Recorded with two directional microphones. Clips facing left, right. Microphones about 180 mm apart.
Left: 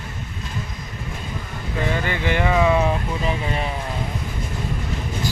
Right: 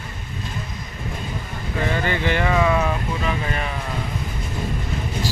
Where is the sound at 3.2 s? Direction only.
30° left (ahead or behind).